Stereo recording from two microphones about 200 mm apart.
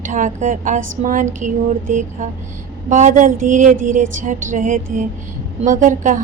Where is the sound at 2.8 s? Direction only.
40° right (ahead or behind).